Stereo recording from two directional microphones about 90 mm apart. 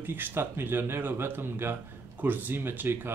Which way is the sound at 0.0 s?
25° right (ahead or behind).